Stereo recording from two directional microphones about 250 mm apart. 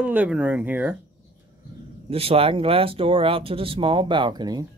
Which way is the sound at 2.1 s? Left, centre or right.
Right.